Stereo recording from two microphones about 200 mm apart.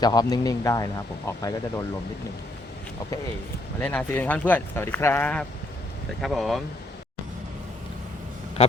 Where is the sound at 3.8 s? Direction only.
10° left (ahead or behind).